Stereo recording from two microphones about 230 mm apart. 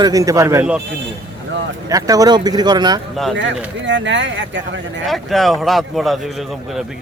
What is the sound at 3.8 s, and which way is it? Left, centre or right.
Speech, right.